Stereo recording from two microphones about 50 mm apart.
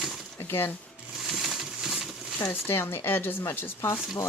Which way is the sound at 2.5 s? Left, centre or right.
Left.